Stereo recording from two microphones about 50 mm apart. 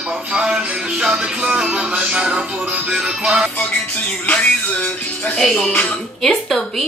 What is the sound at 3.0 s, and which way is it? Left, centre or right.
Speech, centre.